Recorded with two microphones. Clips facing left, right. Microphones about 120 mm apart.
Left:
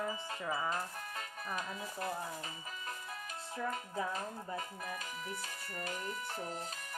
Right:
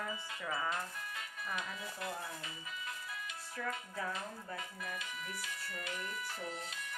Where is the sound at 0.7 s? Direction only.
40° left (ahead or behind).